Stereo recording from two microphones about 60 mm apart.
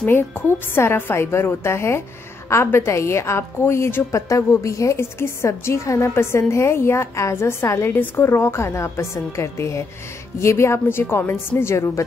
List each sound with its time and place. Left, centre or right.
0.1 s a woman's voice: left
7.9 s a woman's voice: left